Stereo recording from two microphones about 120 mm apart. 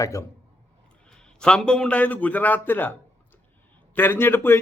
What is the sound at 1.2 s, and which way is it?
Speech, 5° left (ahead or behind).